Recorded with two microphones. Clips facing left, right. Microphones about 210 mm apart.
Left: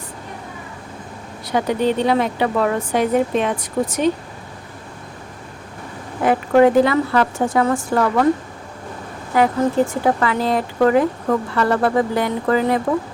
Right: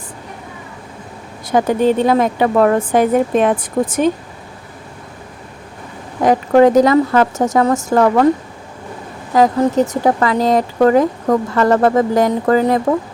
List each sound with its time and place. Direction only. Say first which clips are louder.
1.5 s speech: right 5 dB; 50° right (ahead or behind)
6.2 s speech: right 3 dB; 40° right (ahead or behind)
9.3 s speech: right 4 dB; 40° right (ahead or behind)